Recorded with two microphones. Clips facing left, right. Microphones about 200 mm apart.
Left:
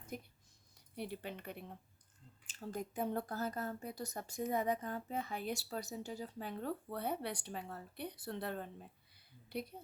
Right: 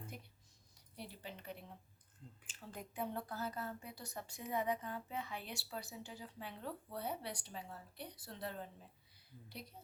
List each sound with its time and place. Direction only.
0.9 s speech: 60° left (ahead or behind)
2.5 s a woman's voice: 40° left (ahead or behind); by 8.9 s 60° left (ahead or behind)